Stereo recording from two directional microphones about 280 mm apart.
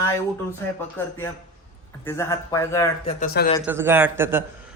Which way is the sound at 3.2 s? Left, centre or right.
Left.